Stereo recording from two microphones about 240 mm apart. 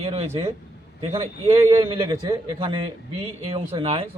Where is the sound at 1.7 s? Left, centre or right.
Centre.